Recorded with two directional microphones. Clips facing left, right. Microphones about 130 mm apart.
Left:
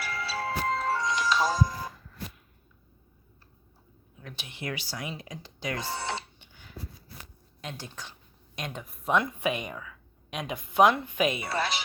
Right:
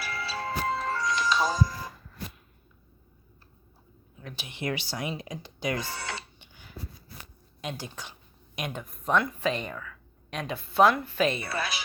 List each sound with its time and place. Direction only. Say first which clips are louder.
0.0 s music: left 1 dB; centre (ahead or behind)
0.9 s music: even; 20° left (ahead or behind)
1.2 s music: right 1 dB; centre (ahead or behind)
4.2 s speech: right 2 dB; centre (ahead or behind)
4.4 s speech: right 4 dB; 20° right (ahead or behind)
5.7 s speech: left 1 dB; 25° left (ahead or behind)
6.4 s a sound: right 1 dB; 15° right (ahead or behind)
7.6 s speech: right 3 dB; 15° right (ahead or behind)
8.8 s speech: left 1 dB; centre (ahead or behind)
9.1 s speech: right 1 dB; 15° left (ahead or behind)